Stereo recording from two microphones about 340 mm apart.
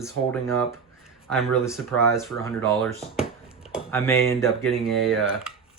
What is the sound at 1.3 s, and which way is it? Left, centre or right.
Speech, centre.